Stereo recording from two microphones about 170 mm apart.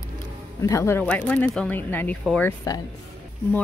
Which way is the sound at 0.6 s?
15° left (ahead or behind).